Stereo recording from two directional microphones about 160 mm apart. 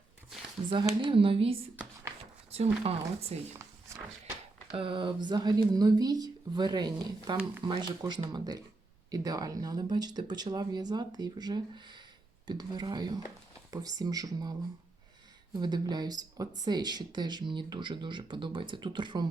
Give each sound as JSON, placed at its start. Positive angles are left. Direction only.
{"t": 0.7, "sound": "speech", "side_deg": -30}
{"t": 2.8, "sound": "speech", "side_deg": -35}
{"t": 4.8, "sound": "speech", "side_deg": -30}
{"t": 15.5, "sound": "speech", "side_deg": -25}